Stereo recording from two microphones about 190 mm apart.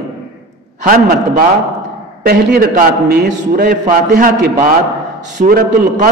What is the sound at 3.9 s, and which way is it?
A man's voice, 45° right (ahead or behind).